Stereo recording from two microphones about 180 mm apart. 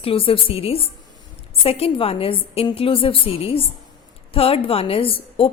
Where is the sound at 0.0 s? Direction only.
30° left (ahead or behind).